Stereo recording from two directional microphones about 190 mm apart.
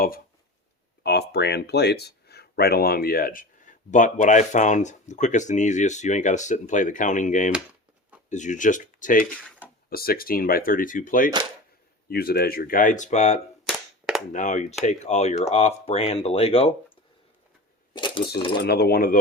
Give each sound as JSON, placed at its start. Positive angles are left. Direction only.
{"t": 1.0, "sound": "speech", "side_deg": 60}
{"t": 13.7, "sound": "cap gun", "side_deg": 0}
{"t": 14.3, "sound": "speech", "side_deg": 40}
{"t": 17.9, "sound": "speech", "side_deg": 25}
{"t": 18.6, "sound": "speech", "side_deg": 55}